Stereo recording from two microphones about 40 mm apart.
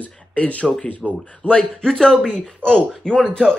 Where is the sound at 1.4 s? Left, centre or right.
Left.